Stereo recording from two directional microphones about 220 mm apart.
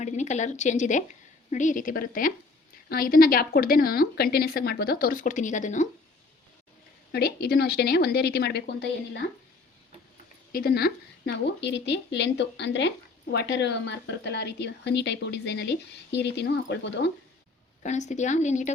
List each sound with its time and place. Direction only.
0.0 s a woman's voice: 30° left (ahead or behind)
7.1 s a woman's voice: 45° left (ahead or behind)
10.5 s a woman's voice: 45° left (ahead or behind)
17.8 s a woman's voice: 30° left (ahead or behind)